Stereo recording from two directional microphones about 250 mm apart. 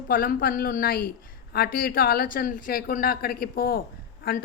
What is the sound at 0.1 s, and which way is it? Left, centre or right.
A woman's voice, left.